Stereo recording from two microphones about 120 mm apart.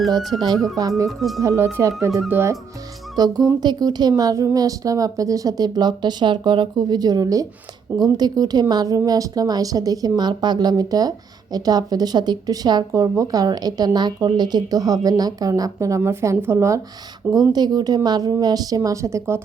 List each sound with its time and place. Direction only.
0.3 s speech: 35° right (ahead or behind)
1.0 s speech: centre (ahead or behind)
1.4 s speech: 25° right (ahead or behind)
3.2 s speech: 35° right (ahead or behind)
17.5 s speech: 35° right (ahead or behind)